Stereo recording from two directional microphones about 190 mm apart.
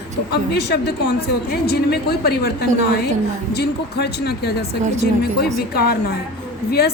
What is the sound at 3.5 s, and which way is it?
A woman's voice, 60° left (ahead or behind).